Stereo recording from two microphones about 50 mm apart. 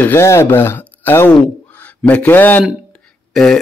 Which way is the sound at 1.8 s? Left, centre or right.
Left.